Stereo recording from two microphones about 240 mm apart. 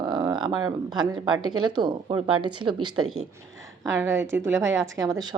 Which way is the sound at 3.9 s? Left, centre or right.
Centre.